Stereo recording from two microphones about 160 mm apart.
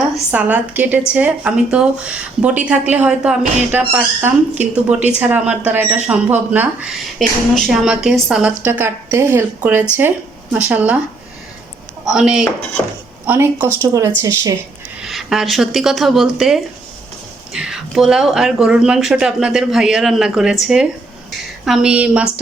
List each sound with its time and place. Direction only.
0.3 s speech: 10° right (ahead or behind)
12.0 s speech: 5° right (ahead or behind)
15.0 s speech: centre (ahead or behind)